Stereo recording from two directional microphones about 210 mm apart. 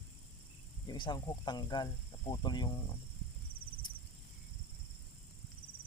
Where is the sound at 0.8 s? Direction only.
20° left (ahead or behind).